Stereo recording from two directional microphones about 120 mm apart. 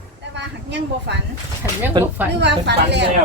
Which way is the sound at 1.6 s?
15° right (ahead or behind).